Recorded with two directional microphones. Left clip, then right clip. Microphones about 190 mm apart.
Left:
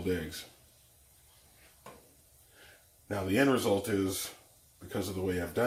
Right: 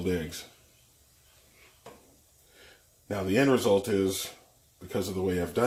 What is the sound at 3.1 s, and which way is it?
Speech, 50° right (ahead or behind).